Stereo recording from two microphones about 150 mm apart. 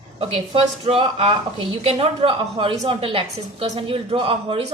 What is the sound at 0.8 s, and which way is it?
A woman's voice, 40° right (ahead or behind).